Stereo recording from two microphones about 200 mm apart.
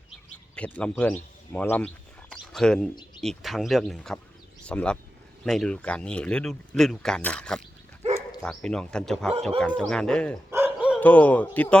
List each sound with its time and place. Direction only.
0.5 s a man's voice: 5° left (ahead or behind)
2.3 s a sound: 5° left (ahead or behind)
3.2 s speech: centre (ahead or behind)
8.0 s bow-wow: 30° right (ahead or behind)
8.4 s speech: 5° left (ahead or behind)
10.5 s dog: 10° right (ahead or behind)
11.0 s a man's voice: 5° left (ahead or behind)